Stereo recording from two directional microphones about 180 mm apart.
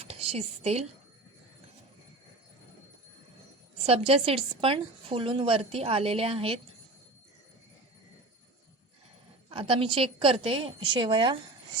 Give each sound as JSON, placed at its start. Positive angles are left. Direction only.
{"t": 0.1, "sound": "a woman's voice", "side_deg": -35}
{"t": 3.8, "sound": "a woman's voice", "side_deg": -35}
{"t": 9.5, "sound": "a woman's voice", "side_deg": -30}